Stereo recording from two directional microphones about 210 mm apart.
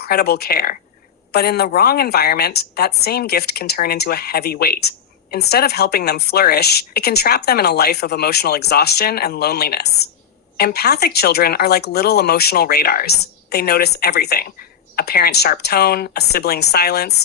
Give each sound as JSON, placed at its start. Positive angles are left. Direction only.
{"t": 0.0, "sound": "a woman's voice", "side_deg": 50}